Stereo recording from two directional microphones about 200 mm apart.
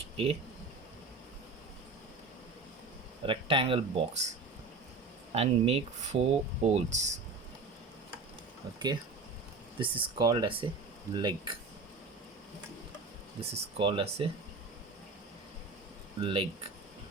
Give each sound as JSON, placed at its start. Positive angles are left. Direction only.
{"t": 0.0, "sound": "a sound", "side_deg": -30}
{"t": 3.2, "sound": "speech", "side_deg": -25}
{"t": 9.7, "sound": "speech", "side_deg": -25}
{"t": 13.4, "sound": "speech", "side_deg": -25}
{"t": 16.2, "sound": "speech", "side_deg": -25}